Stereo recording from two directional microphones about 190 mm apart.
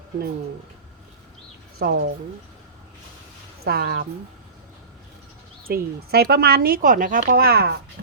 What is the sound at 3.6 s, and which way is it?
Speech, 55° right (ahead or behind).